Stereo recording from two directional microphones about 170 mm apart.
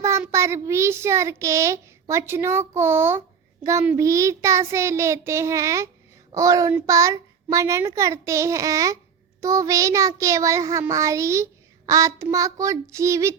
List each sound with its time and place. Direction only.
0.0 s a child's voice: 15° right (ahead or behind)